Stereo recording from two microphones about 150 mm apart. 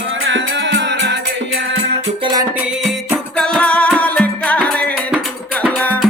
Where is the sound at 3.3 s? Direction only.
5° left (ahead or behind).